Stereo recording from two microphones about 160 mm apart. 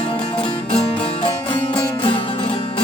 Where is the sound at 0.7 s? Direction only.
35° left (ahead or behind).